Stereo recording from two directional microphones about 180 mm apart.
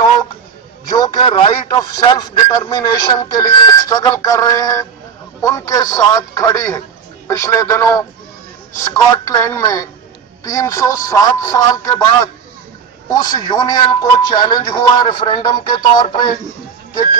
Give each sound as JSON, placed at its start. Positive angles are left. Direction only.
{"t": 0.8, "sound": "a man's voice", "side_deg": 25}
{"t": 13.1, "sound": "speech", "side_deg": 20}